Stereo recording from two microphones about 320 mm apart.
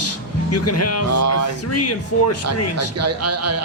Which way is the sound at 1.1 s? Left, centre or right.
Right.